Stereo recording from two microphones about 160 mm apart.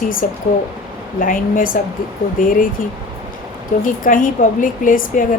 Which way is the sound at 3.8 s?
60° left (ahead or behind).